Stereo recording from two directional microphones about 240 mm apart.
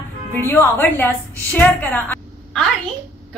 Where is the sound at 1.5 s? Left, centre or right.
Centre.